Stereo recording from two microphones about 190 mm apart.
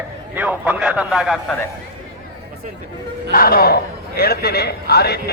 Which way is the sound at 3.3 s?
50° left (ahead or behind).